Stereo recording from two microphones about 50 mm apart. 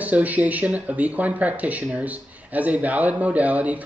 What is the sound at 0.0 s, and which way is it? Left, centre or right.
Speech, right.